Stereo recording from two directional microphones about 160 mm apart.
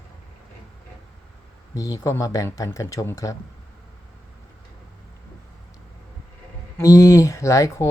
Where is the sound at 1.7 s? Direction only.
20° left (ahead or behind).